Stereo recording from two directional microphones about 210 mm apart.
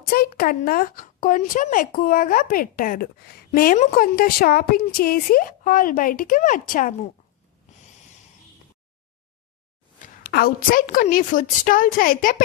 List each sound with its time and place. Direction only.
0.1 s speech: 45° left (ahead or behind)
10.2 s a woman's voice: 45° left (ahead or behind)